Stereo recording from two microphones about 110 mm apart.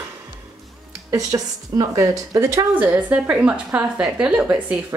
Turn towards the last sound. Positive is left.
turn(degrees=-10)  # may be behind; listen again after turning